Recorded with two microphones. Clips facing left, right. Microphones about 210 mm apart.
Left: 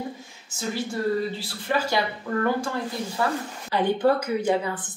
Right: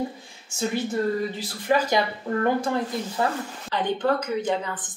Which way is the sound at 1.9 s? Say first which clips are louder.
Right 2 dB; 20° right (ahead or behind).